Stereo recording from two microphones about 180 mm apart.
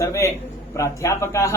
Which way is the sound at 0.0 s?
15° left (ahead or behind).